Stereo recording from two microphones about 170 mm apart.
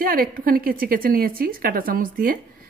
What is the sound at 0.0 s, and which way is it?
Speech, 60° right (ahead or behind).